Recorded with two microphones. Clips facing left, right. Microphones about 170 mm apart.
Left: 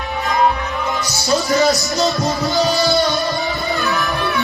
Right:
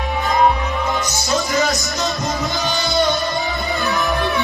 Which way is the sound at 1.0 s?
35° left (ahead or behind).